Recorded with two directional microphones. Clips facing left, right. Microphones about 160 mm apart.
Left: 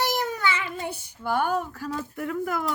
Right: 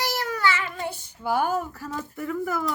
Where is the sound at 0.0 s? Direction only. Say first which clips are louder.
Even; 20° left (ahead or behind).